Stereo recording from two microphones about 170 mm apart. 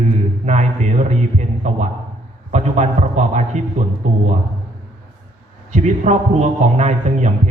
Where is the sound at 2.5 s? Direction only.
40° right (ahead or behind).